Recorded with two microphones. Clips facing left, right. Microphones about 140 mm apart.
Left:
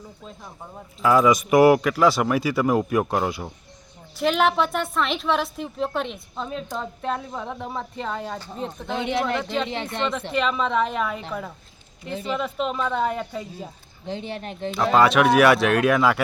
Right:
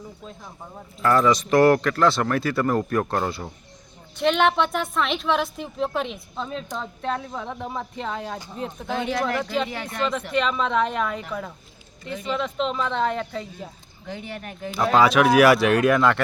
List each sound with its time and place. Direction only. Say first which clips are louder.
1.0 s a woman's voice: left 1 dB; 10° left (ahead or behind)
8.9 s speech: left 1 dB; 20° left (ahead or behind)
10.3 s a woman's voice: even; centre (ahead or behind)
14.1 s speech: left 3 dB; 25° left (ahead or behind)
14.7 s a woman's voice: even; 5° right (ahead or behind)